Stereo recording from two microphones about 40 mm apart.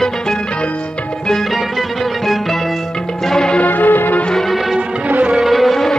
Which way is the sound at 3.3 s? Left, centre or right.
Centre.